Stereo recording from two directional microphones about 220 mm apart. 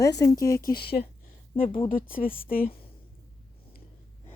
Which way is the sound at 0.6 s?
45° left (ahead or behind).